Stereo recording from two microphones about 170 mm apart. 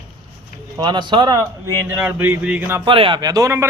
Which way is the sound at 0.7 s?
25° right (ahead or behind).